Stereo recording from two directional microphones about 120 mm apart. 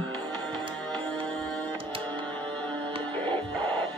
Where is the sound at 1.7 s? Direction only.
45° right (ahead or behind).